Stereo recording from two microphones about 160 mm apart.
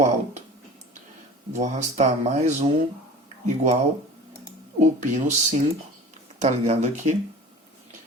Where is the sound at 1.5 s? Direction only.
45° right (ahead or behind).